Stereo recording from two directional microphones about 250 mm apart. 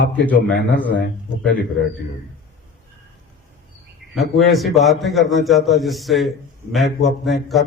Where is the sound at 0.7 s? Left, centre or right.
Centre.